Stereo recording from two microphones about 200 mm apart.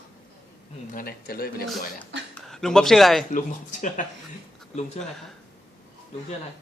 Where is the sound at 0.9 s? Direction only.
50° left (ahead or behind).